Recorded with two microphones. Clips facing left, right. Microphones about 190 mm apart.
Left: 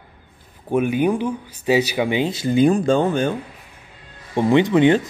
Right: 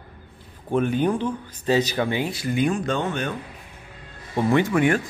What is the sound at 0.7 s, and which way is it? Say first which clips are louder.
Speech: left 3 dB; 10° left (ahead or behind).